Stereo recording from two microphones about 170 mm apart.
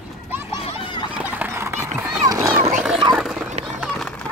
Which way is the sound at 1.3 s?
10° right (ahead or behind).